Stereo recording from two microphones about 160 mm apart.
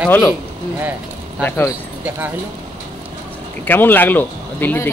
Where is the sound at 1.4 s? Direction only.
20° left (ahead or behind).